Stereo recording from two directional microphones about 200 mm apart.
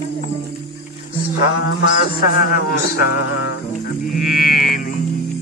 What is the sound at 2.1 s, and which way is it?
Speech, 50° left (ahead or behind).